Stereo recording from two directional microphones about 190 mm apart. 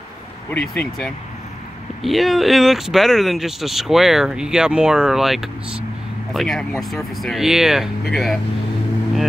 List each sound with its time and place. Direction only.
0.5 s speech: 5° left (ahead or behind)